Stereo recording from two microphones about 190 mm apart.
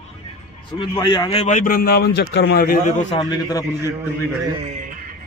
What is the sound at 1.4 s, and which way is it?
A man's voice, 40° left (ahead or behind).